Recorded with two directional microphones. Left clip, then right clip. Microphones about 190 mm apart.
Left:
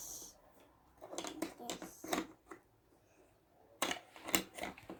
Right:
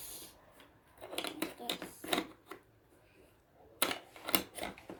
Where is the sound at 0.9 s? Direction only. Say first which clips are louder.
Right 4 dB; centre (ahead or behind).